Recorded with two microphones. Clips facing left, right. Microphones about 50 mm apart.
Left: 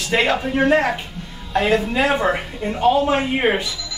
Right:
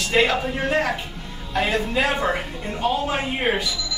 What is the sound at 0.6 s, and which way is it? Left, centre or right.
Speech, left.